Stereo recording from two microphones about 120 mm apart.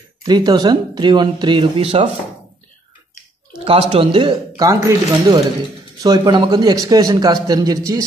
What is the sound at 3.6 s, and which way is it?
Speech, 55° right (ahead or behind).